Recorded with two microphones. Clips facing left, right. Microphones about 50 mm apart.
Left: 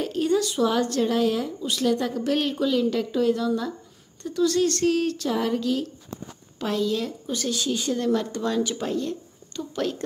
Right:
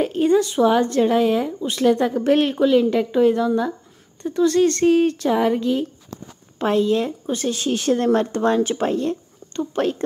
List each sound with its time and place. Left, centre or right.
0.0 s speech: right
7.7 s speech: right